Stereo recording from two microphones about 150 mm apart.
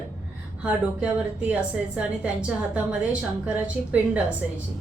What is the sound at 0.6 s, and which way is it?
A woman's voice, 10° right (ahead or behind).